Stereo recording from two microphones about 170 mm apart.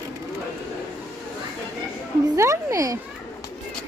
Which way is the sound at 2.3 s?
15° right (ahead or behind).